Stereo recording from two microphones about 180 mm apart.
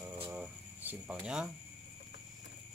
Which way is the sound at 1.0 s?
5° right (ahead or behind).